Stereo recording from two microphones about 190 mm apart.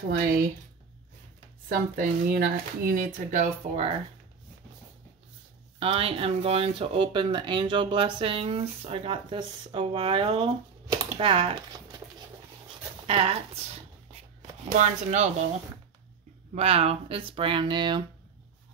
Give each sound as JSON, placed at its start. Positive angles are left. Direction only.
{"t": 1.7, "sound": "speech", "side_deg": -50}
{"t": 5.8, "sound": "speech", "side_deg": -30}
{"t": 13.0, "sound": "speech", "side_deg": -30}
{"t": 14.8, "sound": "speech", "side_deg": -40}
{"t": 16.5, "sound": "speech", "side_deg": -30}